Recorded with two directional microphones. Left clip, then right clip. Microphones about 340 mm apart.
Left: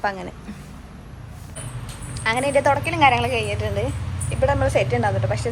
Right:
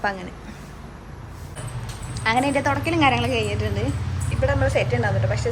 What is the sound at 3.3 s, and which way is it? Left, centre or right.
Speech, centre.